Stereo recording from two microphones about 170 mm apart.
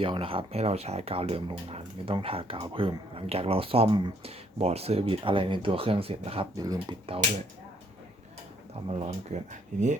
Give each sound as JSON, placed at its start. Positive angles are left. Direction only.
{"t": 0.0, "sound": "speech", "side_deg": -30}
{"t": 6.6, "sound": "speech", "side_deg": -25}
{"t": 8.9, "sound": "speech", "side_deg": -40}